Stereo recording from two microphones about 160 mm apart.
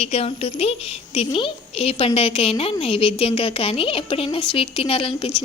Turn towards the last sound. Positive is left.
turn(degrees=35)  # may be behind; listen again after turning